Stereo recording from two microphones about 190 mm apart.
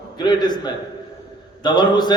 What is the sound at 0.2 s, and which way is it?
A man's voice, 20° left (ahead or behind).